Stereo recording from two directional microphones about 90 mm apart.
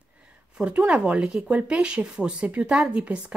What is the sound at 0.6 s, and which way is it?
Speech, 15° right (ahead or behind).